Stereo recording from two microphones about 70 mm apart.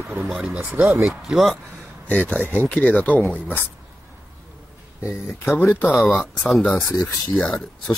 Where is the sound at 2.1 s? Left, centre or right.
Left.